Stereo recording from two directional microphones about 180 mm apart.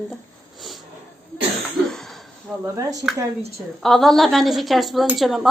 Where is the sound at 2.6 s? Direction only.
15° right (ahead or behind).